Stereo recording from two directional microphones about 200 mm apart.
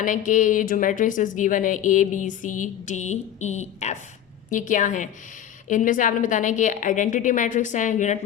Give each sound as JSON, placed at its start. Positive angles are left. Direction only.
{"t": 0.0, "sound": "a woman's voice", "side_deg": 40}